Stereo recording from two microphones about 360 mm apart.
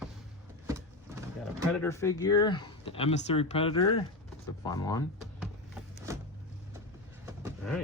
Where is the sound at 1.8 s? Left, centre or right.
Centre.